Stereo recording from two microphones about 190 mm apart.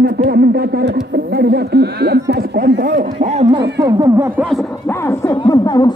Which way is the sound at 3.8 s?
15° right (ahead or behind).